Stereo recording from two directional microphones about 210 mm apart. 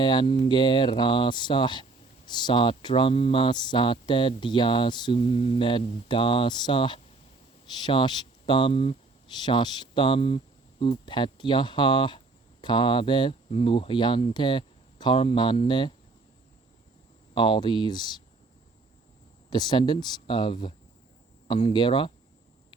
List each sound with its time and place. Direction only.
0.0 s speech: 20° left (ahead or behind)
17.3 s speech: 20° left (ahead or behind)
19.5 s speech: 20° left (ahead or behind)